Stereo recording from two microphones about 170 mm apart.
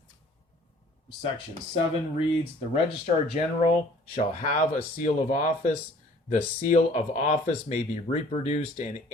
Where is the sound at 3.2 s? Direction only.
35° left (ahead or behind).